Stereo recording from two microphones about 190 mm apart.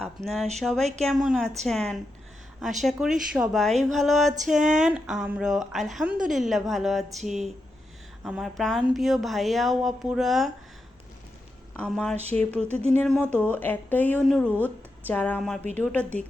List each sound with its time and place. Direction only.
0.0 s a woman's voice: centre (ahead or behind)
4.5 s speech: 40° right (ahead or behind)
4.8 s a woman's voice: 5° right (ahead or behind)
11.8 s a woman's voice: centre (ahead or behind)
12.7 s speech: 35° right (ahead or behind)
13.0 s a woman's voice: 10° left (ahead or behind)